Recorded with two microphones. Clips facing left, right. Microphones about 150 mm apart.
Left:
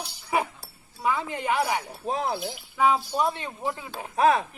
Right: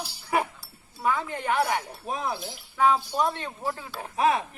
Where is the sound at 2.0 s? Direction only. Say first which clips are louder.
Left 3 dB; 30° left (ahead or behind).